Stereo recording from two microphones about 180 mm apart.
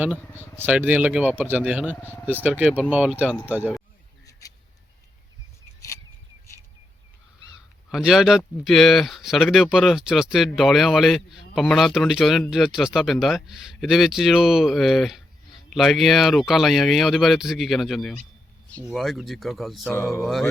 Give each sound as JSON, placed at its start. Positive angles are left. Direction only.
{"t": 0.6, "sound": "a man's voice", "side_deg": -10}
{"t": 2.0, "sound": "speech", "side_deg": 10}
{"t": 2.2, "sound": "a man's voice", "side_deg": -10}
{"t": 4.3, "sound": "a sound", "side_deg": 20}
{"t": 7.9, "sound": "speech", "side_deg": 0}